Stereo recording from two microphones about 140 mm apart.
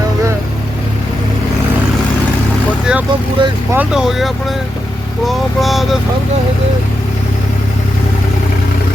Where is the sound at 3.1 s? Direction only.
35° right (ahead or behind).